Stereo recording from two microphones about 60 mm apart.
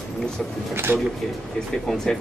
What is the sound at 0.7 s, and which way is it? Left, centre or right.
Speech, right.